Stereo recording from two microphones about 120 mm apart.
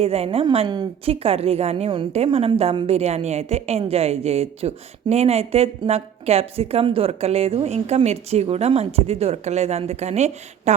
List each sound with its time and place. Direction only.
0.0 s a woman's voice: 55° right (ahead or behind)
2.1 s a woman's voice: 60° right (ahead or behind)